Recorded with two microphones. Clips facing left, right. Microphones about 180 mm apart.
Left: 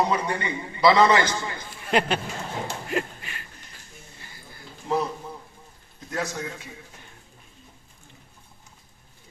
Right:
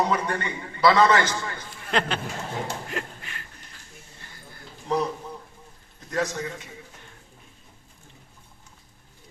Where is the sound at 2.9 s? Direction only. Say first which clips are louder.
Left 5 dB; 10° left (ahead or behind).